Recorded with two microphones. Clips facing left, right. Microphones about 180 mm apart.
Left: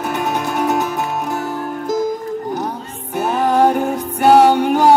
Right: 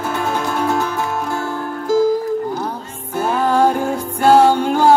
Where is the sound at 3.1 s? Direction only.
15° left (ahead or behind).